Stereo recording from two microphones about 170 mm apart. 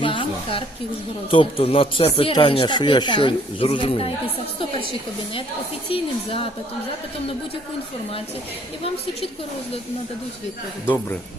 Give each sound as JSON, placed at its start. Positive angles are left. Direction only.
{"t": 0.0, "sound": "a sound", "side_deg": 30}
{"t": 1.3, "sound": "speech", "side_deg": 35}
{"t": 5.9, "sound": "speech", "side_deg": 35}
{"t": 10.8, "sound": "a man's voice", "side_deg": 10}